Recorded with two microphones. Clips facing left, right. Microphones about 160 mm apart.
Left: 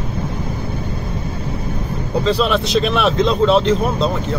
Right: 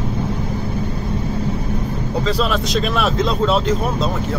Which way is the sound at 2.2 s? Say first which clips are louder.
Left 3 dB; centre (ahead or behind).